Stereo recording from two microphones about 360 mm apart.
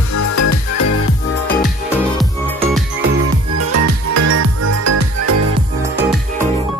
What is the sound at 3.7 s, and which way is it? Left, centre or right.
Music, right.